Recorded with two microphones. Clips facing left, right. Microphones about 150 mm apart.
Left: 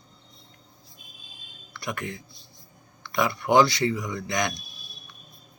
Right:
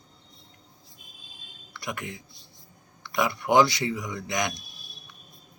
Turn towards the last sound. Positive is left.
turn(degrees=-15)  # may be behind; listen again after turning